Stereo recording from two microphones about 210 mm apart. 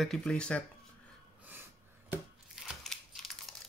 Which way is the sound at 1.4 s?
10° right (ahead or behind).